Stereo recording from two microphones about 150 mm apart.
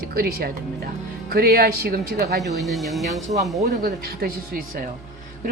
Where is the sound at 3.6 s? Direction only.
90° right.